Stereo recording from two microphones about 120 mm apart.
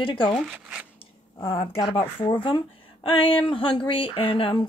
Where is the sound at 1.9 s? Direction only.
50° left (ahead or behind).